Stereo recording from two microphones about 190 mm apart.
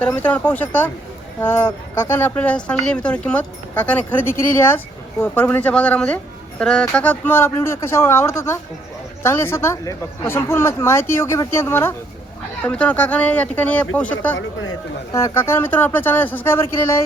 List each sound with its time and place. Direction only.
0.0 s speech: 10° left (ahead or behind)
14.3 s speech: 90° left
15.1 s speech: 15° left (ahead or behind)